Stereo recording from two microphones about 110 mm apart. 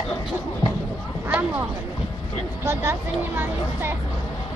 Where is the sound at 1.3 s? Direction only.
20° right (ahead or behind).